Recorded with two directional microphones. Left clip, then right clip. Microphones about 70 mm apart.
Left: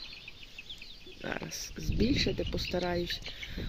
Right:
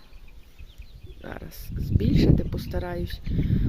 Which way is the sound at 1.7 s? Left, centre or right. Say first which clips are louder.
Right 4 dB; right.